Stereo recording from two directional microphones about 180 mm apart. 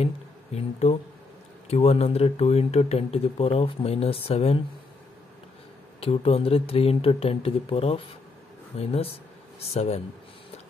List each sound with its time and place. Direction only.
0.6 s speech: 35° left (ahead or behind)
5.9 s speech: 30° left (ahead or behind)